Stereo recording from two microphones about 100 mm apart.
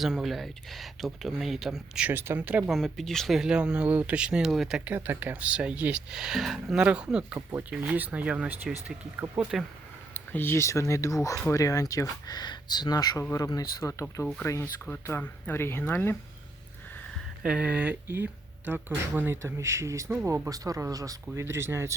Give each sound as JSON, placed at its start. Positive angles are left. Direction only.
{"t": 0.0, "sound": "speech", "side_deg": 0}
{"t": 2.0, "sound": "speech", "side_deg": -20}
{"t": 2.6, "sound": "speech", "side_deg": 0}
{"t": 4.9, "sound": "speech", "side_deg": -20}
{"t": 9.2, "sound": "speech", "side_deg": -30}
{"t": 10.2, "sound": "speech", "side_deg": 20}
{"t": 17.4, "sound": "speech", "side_deg": -10}